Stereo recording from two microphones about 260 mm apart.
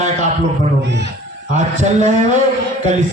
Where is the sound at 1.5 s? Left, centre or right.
Right.